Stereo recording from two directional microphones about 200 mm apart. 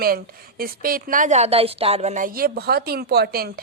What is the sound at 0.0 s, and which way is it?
A woman's voice, 50° right (ahead or behind).